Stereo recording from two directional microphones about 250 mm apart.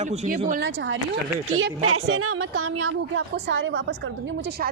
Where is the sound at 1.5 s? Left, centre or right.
Right.